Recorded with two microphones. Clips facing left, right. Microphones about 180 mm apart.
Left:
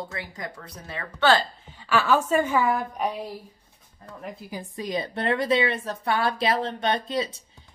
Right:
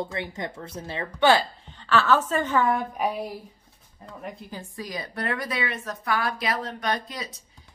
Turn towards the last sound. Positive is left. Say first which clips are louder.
# left 4 dB
turn(degrees=25)  # may be behind; listen again after turning